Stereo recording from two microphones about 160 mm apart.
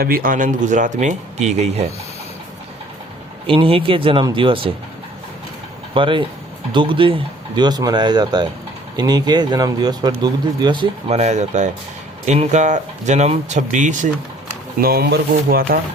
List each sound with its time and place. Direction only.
0.0 s speech: 65° right (ahead or behind); by 1.8 s 45° right (ahead or behind)
3.4 s speech: 35° right (ahead or behind)
5.9 s speech: 30° right (ahead or behind)
11.1 s speech: 45° right (ahead or behind)
14.8 s speech: 70° right (ahead or behind)